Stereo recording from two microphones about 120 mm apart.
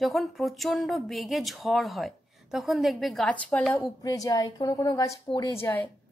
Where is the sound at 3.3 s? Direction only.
10° left (ahead or behind).